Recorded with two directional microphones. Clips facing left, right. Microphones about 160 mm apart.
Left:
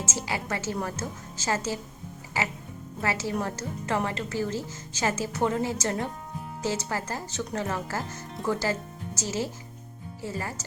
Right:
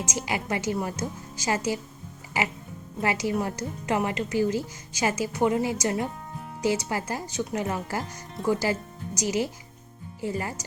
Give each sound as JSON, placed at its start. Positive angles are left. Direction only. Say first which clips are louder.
{"t": 0.0, "sound": "speech", "louder": "right 2 dB", "side_deg": -15}